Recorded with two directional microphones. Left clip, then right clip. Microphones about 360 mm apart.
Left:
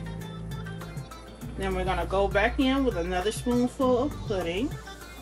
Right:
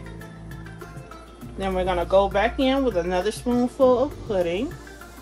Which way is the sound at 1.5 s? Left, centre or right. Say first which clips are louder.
Right 5 dB; right.